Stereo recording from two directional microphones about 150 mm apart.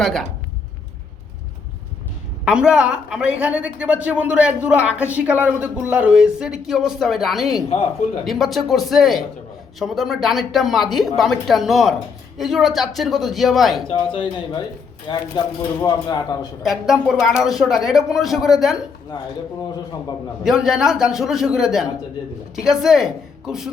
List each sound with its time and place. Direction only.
0.0 s speech: 5° left (ahead or behind)
2.4 s a woman's voice: 5° right (ahead or behind)
13.8 s speech: 35° left (ahead or behind)
16.6 s speech: 5° right (ahead or behind)
19.7 s speech: 25° left (ahead or behind)
20.4 s speech: 5° right (ahead or behind)